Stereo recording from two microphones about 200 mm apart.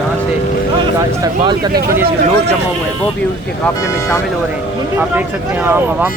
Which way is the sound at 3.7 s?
15° left (ahead or behind).